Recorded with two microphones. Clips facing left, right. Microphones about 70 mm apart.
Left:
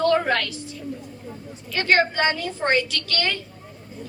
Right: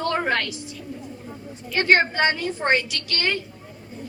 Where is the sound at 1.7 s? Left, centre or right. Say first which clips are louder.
Right 1 dB; right.